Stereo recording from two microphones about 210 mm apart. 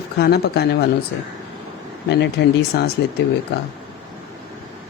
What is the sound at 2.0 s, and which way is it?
Speech, 55° left (ahead or behind).